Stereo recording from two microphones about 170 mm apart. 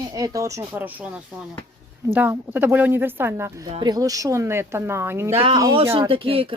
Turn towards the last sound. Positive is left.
turn(degrees=-30)  # may be behind; listen again after turning